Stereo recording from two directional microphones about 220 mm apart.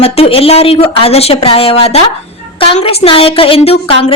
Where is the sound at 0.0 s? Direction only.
25° left (ahead or behind).